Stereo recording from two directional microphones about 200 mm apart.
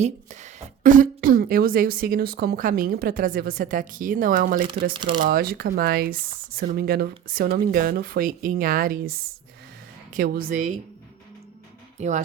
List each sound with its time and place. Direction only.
0.0 s a woman's voice: 35° right (ahead or behind)
4.9 s speech: 25° right (ahead or behind)
5.2 s a woman's voice: 50° right (ahead or behind)
11.9 s speech: 35° right (ahead or behind)